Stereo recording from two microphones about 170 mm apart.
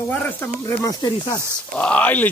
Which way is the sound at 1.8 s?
10° left (ahead or behind).